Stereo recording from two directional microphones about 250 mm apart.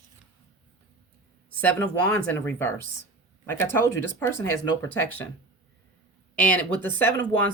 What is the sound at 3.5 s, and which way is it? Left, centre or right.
Speech, centre.